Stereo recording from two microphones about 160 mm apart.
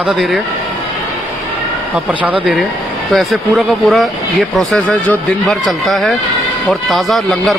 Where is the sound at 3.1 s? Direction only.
Centre (ahead or behind).